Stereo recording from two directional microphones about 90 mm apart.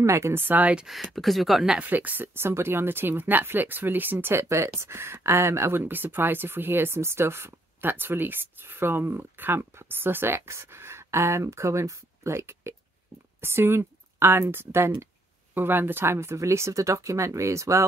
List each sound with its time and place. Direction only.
0.0 s speech: 30° right (ahead or behind)
0.8 s speech: centre (ahead or behind)
1.8 s a woman's voice: 20° right (ahead or behind); by 17.8 s 35° right (ahead or behind)